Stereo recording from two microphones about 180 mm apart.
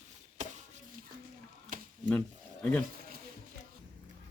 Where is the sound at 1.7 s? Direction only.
50° right (ahead or behind).